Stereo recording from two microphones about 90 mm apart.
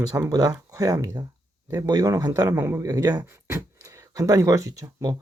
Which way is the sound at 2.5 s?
30° right (ahead or behind).